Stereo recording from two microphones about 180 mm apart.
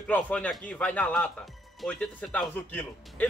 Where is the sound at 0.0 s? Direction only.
10° left (ahead or behind).